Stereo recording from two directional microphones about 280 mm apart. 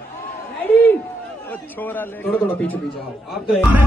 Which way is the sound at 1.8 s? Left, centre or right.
Centre.